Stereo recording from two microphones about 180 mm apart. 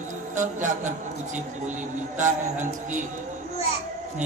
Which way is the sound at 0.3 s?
45° right (ahead or behind).